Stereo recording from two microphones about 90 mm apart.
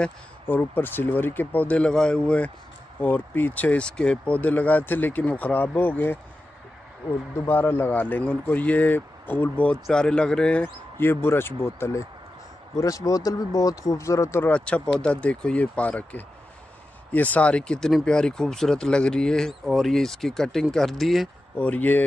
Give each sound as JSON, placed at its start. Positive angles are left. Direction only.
{"t": 0.5, "sound": "speech", "side_deg": 25}
{"t": 7.4, "sound": "speech", "side_deg": 25}
{"t": 12.7, "sound": "speech", "side_deg": 40}
{"t": 14.4, "sound": "speech", "side_deg": 15}
{"t": 21.5, "sound": "speech", "side_deg": 15}